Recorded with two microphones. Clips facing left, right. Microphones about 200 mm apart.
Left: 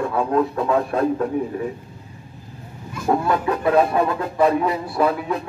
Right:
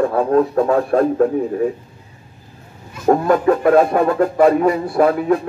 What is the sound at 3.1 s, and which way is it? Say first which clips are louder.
Speech: right 6 dB; 45° right (ahead or behind).